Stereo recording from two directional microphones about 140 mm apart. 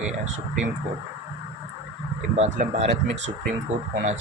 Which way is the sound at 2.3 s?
50° right (ahead or behind).